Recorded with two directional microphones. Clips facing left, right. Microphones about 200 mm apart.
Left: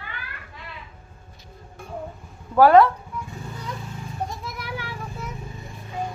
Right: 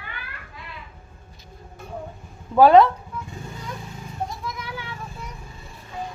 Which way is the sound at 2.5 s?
20° right (ahead or behind).